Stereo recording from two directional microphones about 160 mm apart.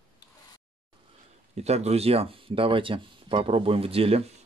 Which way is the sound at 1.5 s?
40° right (ahead or behind).